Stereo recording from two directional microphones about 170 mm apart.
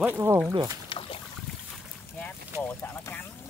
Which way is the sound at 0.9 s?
30° left (ahead or behind).